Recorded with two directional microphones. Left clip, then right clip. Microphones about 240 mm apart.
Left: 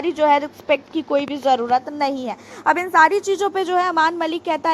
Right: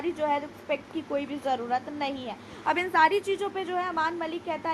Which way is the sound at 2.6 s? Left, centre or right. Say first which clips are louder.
Left 8 dB; centre.